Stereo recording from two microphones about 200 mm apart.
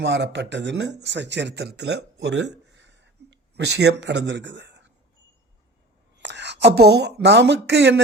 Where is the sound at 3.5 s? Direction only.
55° right (ahead or behind).